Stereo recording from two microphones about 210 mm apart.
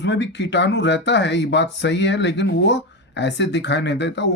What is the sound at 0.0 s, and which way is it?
Speech, 55° left (ahead or behind).